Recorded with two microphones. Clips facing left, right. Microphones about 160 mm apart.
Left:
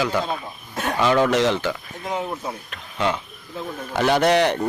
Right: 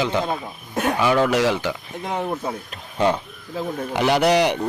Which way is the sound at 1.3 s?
10° right (ahead or behind).